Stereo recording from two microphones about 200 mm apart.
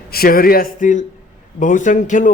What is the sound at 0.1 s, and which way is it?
A man's voice, 50° left (ahead or behind).